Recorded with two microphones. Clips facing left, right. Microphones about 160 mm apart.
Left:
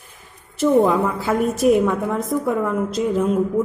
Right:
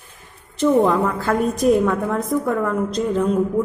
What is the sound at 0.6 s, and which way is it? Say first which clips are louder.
A woman's voice: even; centre (ahead or behind).